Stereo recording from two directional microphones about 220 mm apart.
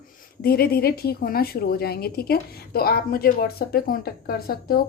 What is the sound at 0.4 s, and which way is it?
A woman's voice, 45° left (ahead or behind).